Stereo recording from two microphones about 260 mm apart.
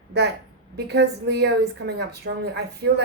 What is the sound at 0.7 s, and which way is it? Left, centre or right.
A woman's voice, right.